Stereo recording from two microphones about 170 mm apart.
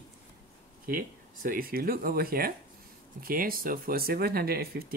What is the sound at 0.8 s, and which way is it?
Speech, 55° right (ahead or behind).